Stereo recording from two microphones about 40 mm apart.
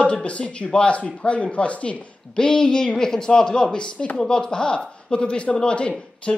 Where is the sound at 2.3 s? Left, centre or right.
Centre.